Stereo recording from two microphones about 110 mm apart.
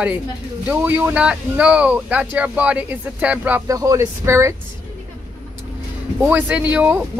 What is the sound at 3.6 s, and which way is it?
Speech, 30° right (ahead or behind).